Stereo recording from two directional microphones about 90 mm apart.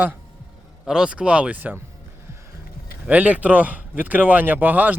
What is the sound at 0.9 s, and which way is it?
Speech, 10° right (ahead or behind).